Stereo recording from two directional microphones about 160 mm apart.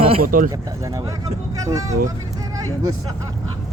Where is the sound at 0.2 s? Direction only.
60° right (ahead or behind).